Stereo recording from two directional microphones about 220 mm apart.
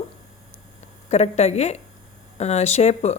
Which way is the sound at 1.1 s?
30° left (ahead or behind).